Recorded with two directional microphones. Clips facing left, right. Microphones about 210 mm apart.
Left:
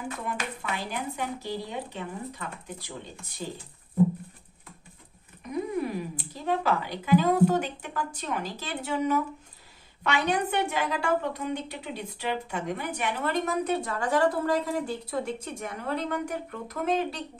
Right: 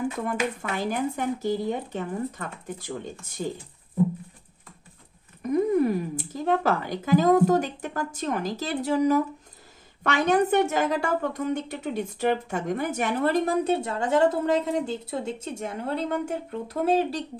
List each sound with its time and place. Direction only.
0.3 s speech: 45° right (ahead or behind)
5.4 s a woman's voice: 50° right (ahead or behind); by 17.2 s 30° right (ahead or behind)